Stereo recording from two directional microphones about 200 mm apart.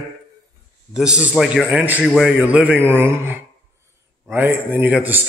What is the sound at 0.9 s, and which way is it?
A man's voice, 5° right (ahead or behind).